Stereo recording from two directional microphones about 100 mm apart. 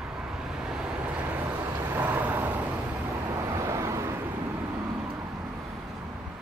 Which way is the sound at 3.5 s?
30° right (ahead or behind).